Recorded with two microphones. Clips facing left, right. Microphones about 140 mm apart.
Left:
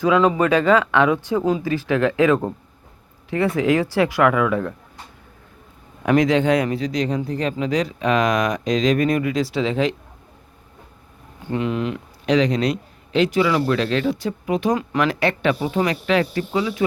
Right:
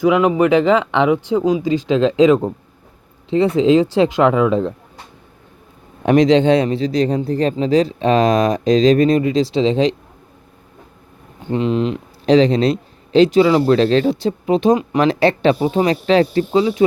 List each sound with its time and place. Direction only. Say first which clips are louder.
0.0 s speech: right 3 dB; 15° right (ahead or behind)
6.0 s speech: right 5 dB; 25° right (ahead or behind)
11.4 s speech: right 5 dB; 25° right (ahead or behind)